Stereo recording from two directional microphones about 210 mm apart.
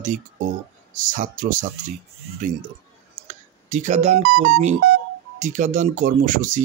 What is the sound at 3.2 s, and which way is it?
Telephone dialing, 35° right (ahead or behind).